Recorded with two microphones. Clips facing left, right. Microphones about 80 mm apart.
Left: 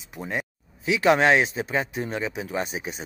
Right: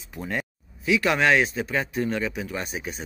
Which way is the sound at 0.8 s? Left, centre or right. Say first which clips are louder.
Left 2 dB; left.